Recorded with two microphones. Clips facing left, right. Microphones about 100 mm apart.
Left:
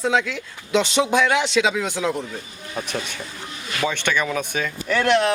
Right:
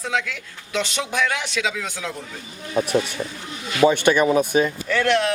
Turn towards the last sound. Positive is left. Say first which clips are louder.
# left 1 dB
turn(degrees=20)  # may be behind; listen again after turning